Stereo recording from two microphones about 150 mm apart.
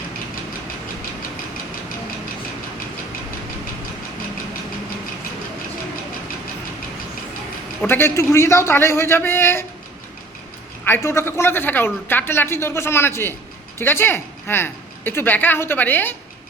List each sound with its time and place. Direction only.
7.8 s a man's voice: 15° left (ahead or behind)
10.8 s a man's voice: 15° left (ahead or behind)